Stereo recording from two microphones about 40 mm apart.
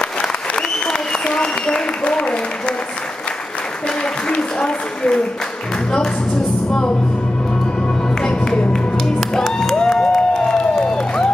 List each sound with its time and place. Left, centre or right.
0.2 s applause: left
4.3 s a sound: left
8.2 s music: centre
9.4 s music: centre
9.8 s crowd: centre